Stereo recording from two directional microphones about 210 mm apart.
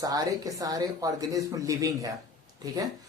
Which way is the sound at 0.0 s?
15° right (ahead or behind).